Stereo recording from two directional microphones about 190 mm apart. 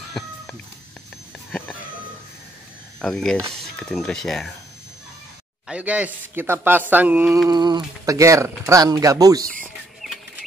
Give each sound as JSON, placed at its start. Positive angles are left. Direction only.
{"t": 3.0, "sound": "speech", "side_deg": 5}
{"t": 5.7, "sound": "speech", "side_deg": -5}
{"t": 7.4, "sound": "speech", "side_deg": -20}